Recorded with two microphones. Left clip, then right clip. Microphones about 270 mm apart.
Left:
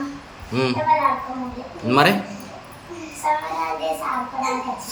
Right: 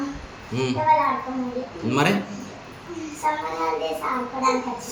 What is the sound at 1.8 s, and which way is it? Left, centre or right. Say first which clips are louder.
Speech: left 6 dB; centre.